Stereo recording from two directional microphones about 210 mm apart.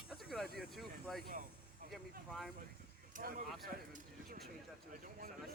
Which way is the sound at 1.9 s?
Centre (ahead or behind).